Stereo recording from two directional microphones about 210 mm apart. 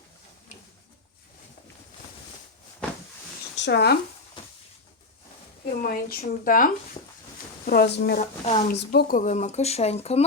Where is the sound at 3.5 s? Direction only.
55° left (ahead or behind).